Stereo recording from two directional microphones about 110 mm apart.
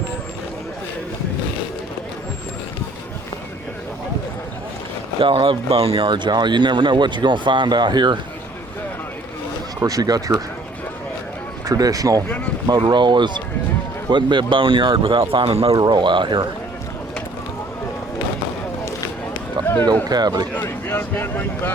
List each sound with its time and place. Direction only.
5.2 s speech: 55° right (ahead or behind)
6.1 s speech: 45° right (ahead or behind)
9.8 s speech: 35° right (ahead or behind)
11.6 s speech: 35° right (ahead or behind)
12.9 s speech: 45° right (ahead or behind); by 15.7 s 60° right (ahead or behind)
15.7 s speech: 45° right (ahead or behind)
19.6 s run: 45° right (ahead or behind)
20.1 s speech: 40° right (ahead or behind)
20.5 s speech: 15° left (ahead or behind)